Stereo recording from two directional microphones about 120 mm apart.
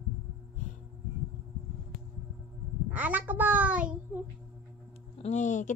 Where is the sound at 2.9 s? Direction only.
15° right (ahead or behind).